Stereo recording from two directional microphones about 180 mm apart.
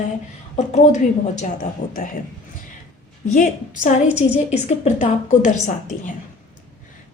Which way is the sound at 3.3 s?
45° left (ahead or behind).